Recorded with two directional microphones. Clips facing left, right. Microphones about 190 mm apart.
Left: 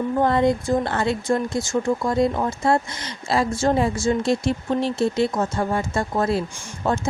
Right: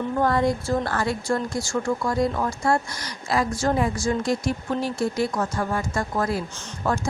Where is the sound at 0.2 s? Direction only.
20° left (ahead or behind).